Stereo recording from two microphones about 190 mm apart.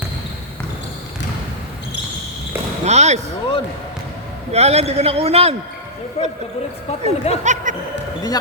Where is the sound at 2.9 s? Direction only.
35° right (ahead or behind).